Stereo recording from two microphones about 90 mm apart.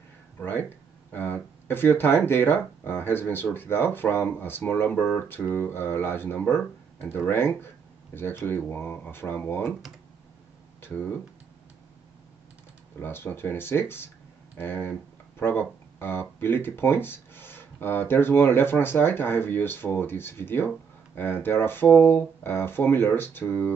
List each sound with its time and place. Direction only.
0.4 s speech: 20° left (ahead or behind)
10.8 s speech: 25° left (ahead or behind)
13.0 s speech: 25° left (ahead or behind)